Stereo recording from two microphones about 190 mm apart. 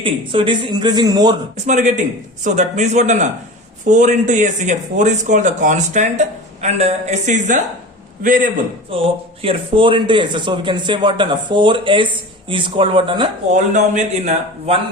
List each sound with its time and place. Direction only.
0.0 s speech: 25° right (ahead or behind)
1.5 s a man's voice: 40° right (ahead or behind)
8.9 s speech: 30° right (ahead or behind)
13.5 s speech: 40° right (ahead or behind)